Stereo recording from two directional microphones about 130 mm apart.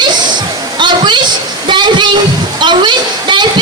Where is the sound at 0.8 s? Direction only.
35° right (ahead or behind).